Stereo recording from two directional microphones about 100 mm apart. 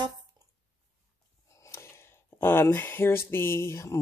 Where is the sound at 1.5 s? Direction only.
30° left (ahead or behind).